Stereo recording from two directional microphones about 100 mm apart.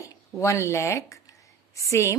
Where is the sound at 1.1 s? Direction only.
35° left (ahead or behind).